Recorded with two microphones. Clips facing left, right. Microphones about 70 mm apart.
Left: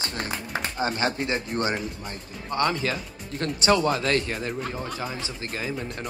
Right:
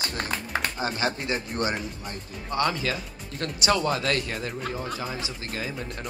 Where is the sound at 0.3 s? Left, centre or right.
Right.